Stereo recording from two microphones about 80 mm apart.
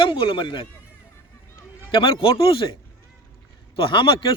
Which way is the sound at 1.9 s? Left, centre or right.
Left.